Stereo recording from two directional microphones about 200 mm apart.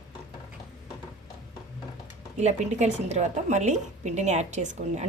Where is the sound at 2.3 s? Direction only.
35° right (ahead or behind).